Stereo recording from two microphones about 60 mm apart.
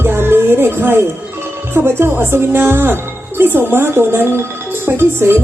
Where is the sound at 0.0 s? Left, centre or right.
Right.